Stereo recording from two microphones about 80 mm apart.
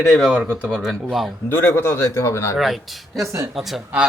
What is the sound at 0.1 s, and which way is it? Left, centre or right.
Speech, centre.